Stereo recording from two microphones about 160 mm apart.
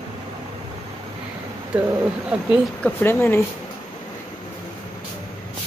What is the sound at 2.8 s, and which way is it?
Speech, 15° left (ahead or behind).